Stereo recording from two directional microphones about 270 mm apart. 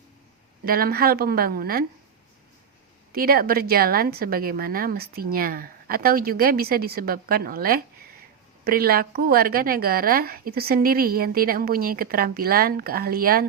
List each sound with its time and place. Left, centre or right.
0.6 s a woman's voice: right
3.1 s a woman's voice: right